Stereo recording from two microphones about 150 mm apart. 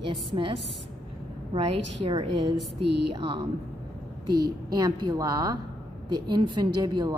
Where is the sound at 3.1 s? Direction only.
35° right (ahead or behind).